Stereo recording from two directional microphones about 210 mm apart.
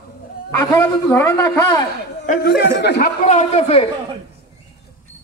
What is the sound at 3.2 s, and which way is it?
Speech, 30° left (ahead or behind).